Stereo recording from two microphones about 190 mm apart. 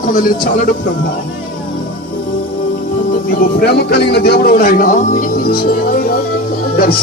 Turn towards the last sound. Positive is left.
turn(degrees=50)  # may be behind; listen again after turning